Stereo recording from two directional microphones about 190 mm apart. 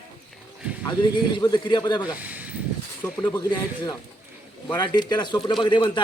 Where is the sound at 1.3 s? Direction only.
25° left (ahead or behind).